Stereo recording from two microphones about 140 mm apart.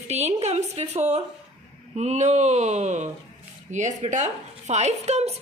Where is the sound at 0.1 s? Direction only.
50° right (ahead or behind).